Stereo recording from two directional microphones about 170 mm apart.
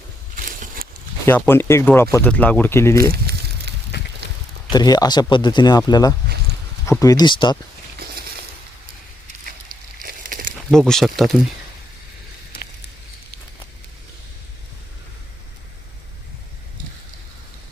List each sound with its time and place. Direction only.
0.3 s a sound: 55° right (ahead or behind)
1.2 s speech: 15° left (ahead or behind)
3.1 s crumpling: 70° right (ahead or behind)
4.7 s speech: 25° left (ahead or behind)
10.0 s a sound: 55° right (ahead or behind)
10.7 s speech: 5° left (ahead or behind)